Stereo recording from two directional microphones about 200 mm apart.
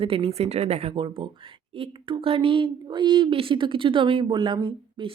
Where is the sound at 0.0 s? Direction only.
30° right (ahead or behind).